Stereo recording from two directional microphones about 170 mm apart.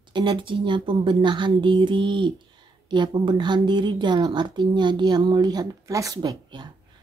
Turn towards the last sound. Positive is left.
turn(degrees=-25)  # may be behind; listen again after turning